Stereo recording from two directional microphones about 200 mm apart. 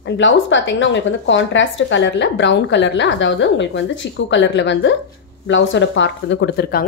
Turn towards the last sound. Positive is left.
turn(degrees=50)  # may be behind; listen again after turning